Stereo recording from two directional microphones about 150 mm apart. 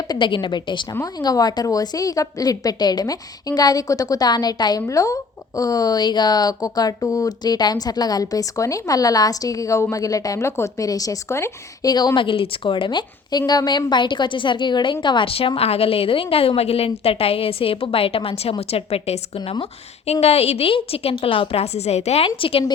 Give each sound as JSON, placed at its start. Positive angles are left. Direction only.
{"t": 0.1, "sound": "a woman's voice", "side_deg": 30}